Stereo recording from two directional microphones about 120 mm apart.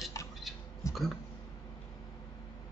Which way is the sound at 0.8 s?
25° left (ahead or behind).